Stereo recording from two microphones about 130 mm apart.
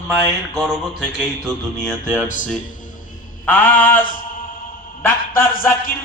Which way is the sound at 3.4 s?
15° left (ahead or behind).